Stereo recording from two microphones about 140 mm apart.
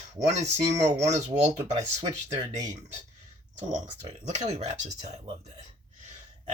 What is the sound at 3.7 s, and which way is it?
Speech, 60° right (ahead or behind).